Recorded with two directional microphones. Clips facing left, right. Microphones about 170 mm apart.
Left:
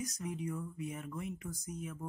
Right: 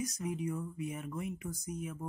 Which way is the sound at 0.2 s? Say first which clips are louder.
Right 2 dB; 15° right (ahead or behind).